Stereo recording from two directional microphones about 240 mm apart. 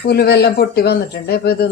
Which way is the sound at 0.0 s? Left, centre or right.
Left.